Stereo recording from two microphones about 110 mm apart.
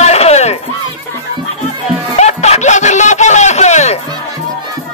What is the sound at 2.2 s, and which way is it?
Music, 90° left.